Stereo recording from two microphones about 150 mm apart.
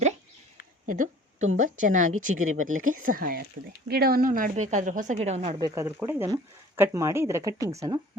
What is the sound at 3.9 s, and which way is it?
Speech, 90° right.